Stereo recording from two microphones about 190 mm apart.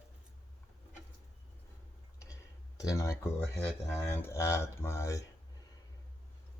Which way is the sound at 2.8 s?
15° left (ahead or behind).